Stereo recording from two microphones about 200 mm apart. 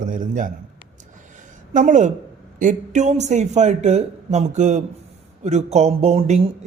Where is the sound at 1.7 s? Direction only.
40° right (ahead or behind).